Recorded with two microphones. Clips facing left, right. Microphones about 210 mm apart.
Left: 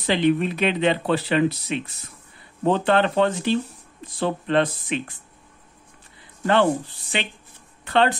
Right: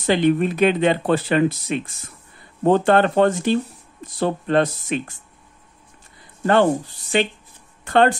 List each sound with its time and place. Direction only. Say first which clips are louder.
0.0 s speech: right 3 dB; 45° right (ahead or behind)
6.4 s speech: right 3 dB; 45° right (ahead or behind)